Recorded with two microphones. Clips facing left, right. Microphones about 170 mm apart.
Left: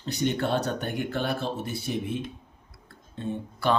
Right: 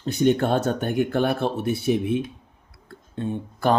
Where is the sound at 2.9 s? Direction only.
55° right (ahead or behind).